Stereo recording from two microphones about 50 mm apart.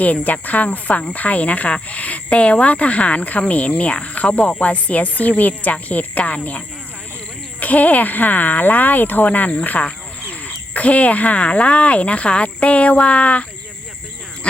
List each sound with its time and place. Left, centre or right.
0.0 s speech: left
7.6 s speech: left